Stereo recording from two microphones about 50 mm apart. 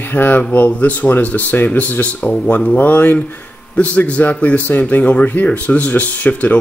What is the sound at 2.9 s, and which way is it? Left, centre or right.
Speech, left.